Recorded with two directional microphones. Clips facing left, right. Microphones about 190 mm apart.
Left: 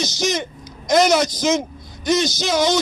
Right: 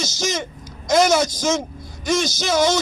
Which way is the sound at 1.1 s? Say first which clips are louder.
Left 1 dB; 20° left (ahead or behind).